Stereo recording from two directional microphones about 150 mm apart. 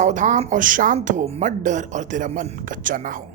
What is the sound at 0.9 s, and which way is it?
Speech, 50° right (ahead or behind).